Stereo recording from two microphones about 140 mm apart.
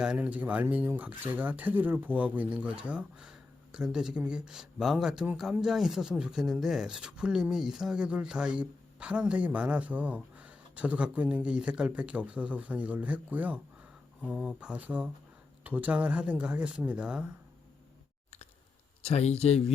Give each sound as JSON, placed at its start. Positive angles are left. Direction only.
{"t": 0.0, "sound": "speech", "side_deg": -10}
{"t": 19.0, "sound": "speech", "side_deg": 50}